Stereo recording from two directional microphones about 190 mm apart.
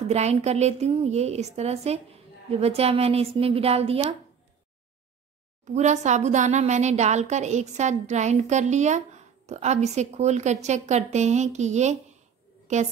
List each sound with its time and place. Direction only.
0.1 s a woman's voice: 35° right (ahead or behind)
5.7 s a woman's voice: 40° right (ahead or behind)